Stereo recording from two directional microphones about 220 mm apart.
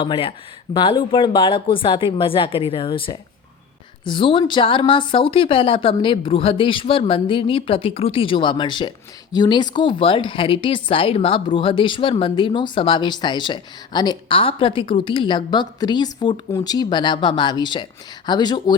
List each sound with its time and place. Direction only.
0.0 s a woman's voice: 25° left (ahead or behind)